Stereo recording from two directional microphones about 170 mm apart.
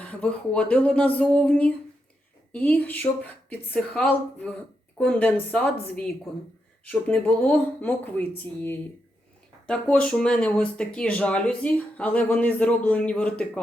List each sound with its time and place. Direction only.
0.0 s speech: 5° left (ahead or behind)
6.8 s speech: 10° left (ahead or behind)